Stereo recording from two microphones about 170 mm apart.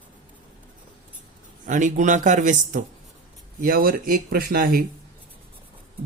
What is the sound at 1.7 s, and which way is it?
Speech, 50° right (ahead or behind).